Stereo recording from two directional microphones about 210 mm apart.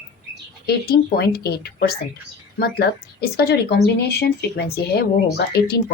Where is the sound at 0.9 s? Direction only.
45° left (ahead or behind).